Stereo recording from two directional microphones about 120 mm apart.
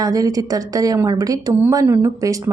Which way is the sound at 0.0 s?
30° right (ahead or behind).